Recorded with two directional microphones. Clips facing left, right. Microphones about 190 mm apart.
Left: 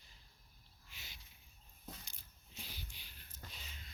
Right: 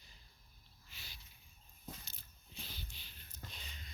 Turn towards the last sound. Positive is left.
turn(degrees=5)  # may be behind; listen again after turning